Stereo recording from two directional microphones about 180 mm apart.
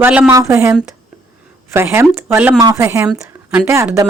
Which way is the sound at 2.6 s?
20° right (ahead or behind).